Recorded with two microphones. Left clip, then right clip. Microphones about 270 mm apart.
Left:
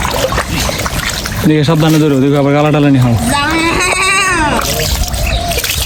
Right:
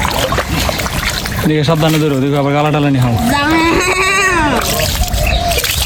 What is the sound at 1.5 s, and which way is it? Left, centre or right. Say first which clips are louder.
Speech: left 2 dB; centre.